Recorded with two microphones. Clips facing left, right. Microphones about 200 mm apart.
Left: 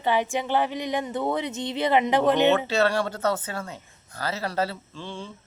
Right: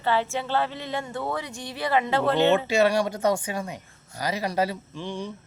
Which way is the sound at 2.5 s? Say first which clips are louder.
Right 2 dB; 10° right (ahead or behind).